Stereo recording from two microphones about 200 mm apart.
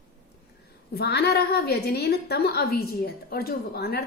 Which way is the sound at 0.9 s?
55° left (ahead or behind).